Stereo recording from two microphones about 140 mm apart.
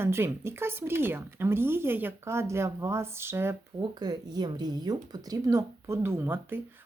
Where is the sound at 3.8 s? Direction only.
30° right (ahead or behind).